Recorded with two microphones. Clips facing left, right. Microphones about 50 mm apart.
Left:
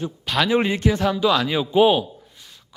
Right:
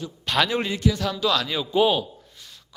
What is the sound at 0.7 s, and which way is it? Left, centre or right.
A man's voice, left.